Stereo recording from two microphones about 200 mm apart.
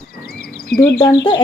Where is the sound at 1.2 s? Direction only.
25° left (ahead or behind).